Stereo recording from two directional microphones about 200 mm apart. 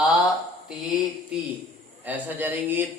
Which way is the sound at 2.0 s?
10° right (ahead or behind).